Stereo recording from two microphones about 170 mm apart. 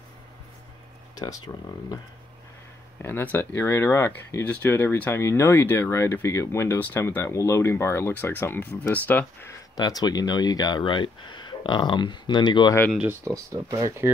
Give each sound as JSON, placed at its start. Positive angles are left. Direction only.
{"t": 1.1, "sound": "speech", "side_deg": 20}
{"t": 3.0, "sound": "speech", "side_deg": 10}
{"t": 9.8, "sound": "speech", "side_deg": 25}
{"t": 13.2, "sound": "speech", "side_deg": -20}